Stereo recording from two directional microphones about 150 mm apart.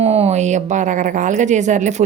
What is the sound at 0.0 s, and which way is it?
A woman's voice, 45° right (ahead or behind).